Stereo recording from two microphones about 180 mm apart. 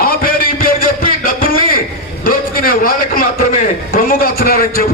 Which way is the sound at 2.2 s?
55° left (ahead or behind).